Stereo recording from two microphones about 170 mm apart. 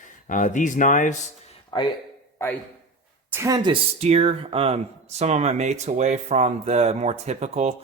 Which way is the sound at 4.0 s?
40° right (ahead or behind).